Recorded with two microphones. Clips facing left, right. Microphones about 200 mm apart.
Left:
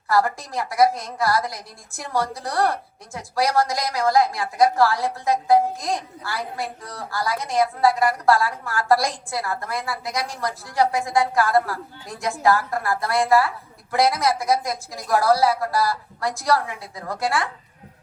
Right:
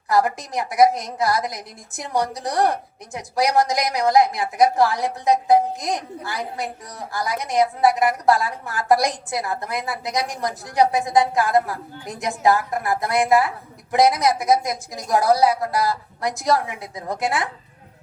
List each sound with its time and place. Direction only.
0.1 s a woman's voice: 20° right (ahead or behind)